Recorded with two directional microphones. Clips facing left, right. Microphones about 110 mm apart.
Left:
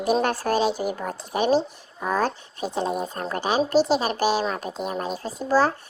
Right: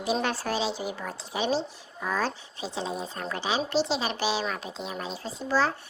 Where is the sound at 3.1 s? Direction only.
45° left (ahead or behind).